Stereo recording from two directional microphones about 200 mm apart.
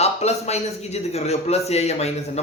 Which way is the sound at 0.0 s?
30° left (ahead or behind).